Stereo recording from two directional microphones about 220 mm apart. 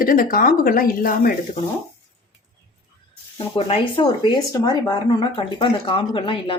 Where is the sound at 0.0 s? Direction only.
40° left (ahead or behind).